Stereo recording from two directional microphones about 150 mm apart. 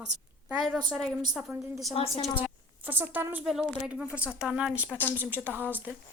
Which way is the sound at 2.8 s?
10° right (ahead or behind).